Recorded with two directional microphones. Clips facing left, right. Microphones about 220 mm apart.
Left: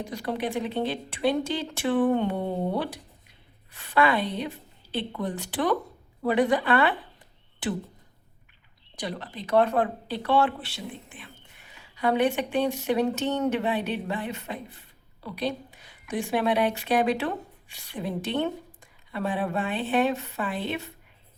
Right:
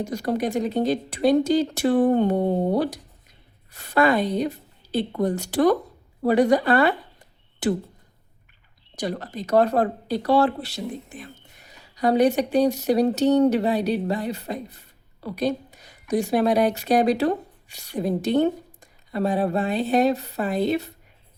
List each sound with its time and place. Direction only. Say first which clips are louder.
0.0 s speech: right 5 dB; 45° right (ahead or behind)
9.0 s speech: right 6 dB; 45° right (ahead or behind)